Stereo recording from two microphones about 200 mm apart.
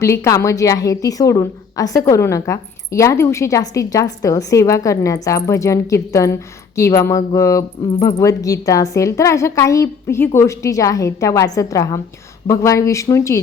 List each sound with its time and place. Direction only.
0.0 s a woman's voice: 15° left (ahead or behind)